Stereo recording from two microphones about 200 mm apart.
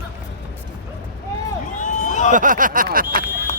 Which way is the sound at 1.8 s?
40° left (ahead or behind).